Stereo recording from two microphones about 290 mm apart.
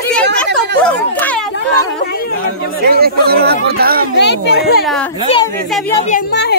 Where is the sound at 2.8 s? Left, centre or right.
Right.